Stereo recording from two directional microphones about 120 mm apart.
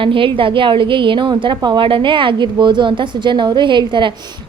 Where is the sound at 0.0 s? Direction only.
45° right (ahead or behind).